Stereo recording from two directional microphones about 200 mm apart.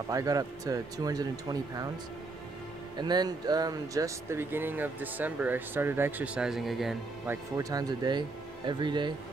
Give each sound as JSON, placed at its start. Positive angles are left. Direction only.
{"t": 0.1, "sound": "speech", "side_deg": -15}
{"t": 3.0, "sound": "speech", "side_deg": -20}
{"t": 7.5, "sound": "speech", "side_deg": -20}